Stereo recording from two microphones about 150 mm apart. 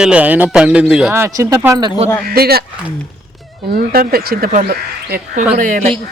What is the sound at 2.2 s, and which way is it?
Speech, 90° right.